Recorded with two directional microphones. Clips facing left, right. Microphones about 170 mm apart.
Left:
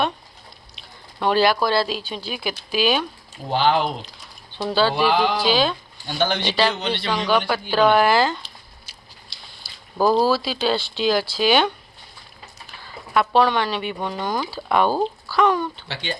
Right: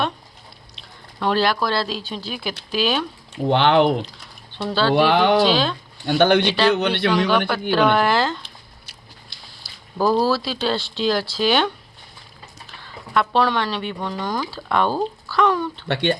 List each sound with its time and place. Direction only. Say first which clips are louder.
0.8 s speech: even; 5° left (ahead or behind)
3.5 s a man's voice: right 4 dB; 65° right (ahead or behind)
4.5 s speech: even; 5° left (ahead or behind)
4.9 s a man's voice: right 4 dB; 60° right (ahead or behind)
5.5 s speech: even; 5° left (ahead or behind)
6.1 s a man's voice: right 7 dB; 60° right (ahead or behind)
7.3 s speech: right 1 dB; centre (ahead or behind)
9.6 s a sound: even; centre (ahead or behind)
10.2 s speech: left 1 dB; centre (ahead or behind)
12.8 s speech: even; 5° left (ahead or behind)
15.9 s a man's voice: right 9 dB; 65° right (ahead or behind)